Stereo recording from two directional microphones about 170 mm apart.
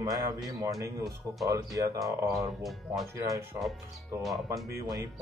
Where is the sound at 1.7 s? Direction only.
20° right (ahead or behind).